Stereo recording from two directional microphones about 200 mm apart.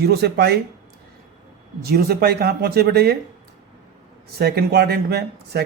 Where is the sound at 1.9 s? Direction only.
50° right (ahead or behind).